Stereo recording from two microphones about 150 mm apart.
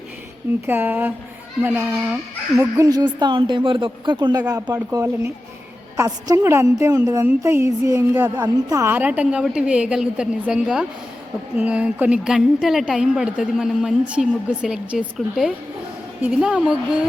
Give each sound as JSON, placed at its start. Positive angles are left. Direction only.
{"t": 0.7, "sound": "a woman's voice", "side_deg": -15}